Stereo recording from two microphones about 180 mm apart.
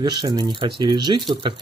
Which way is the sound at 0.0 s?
25° right (ahead or behind).